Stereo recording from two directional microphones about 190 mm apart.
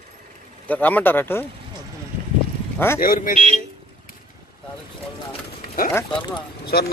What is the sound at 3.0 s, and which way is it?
Speech, 50° left (ahead or behind).